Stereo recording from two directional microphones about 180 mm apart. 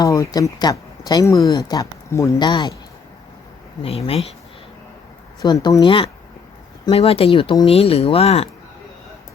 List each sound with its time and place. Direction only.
0.0 s speech: 20° left (ahead or behind)
3.8 s speech: 35° left (ahead or behind)
5.4 s speech: 20° left (ahead or behind)